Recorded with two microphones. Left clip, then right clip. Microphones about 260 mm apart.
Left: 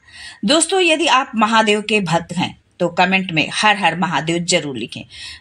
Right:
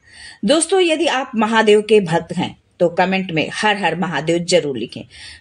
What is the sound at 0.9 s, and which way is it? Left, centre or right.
Speech, centre.